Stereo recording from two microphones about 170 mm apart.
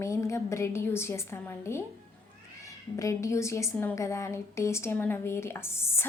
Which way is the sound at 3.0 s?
20° left (ahead or behind).